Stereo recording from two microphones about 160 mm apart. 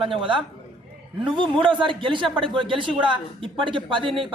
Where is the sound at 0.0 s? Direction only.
30° right (ahead or behind).